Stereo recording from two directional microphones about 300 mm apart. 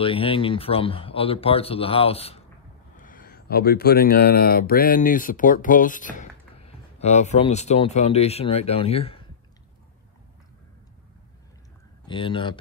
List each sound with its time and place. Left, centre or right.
0.0 s speech: centre
12.1 s speech: centre